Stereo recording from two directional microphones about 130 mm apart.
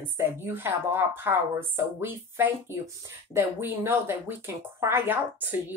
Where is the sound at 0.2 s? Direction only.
15° right (ahead or behind).